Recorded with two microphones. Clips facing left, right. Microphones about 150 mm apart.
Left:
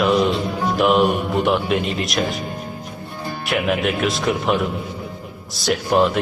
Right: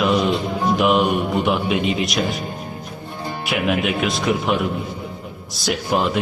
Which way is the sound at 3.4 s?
Centre (ahead or behind).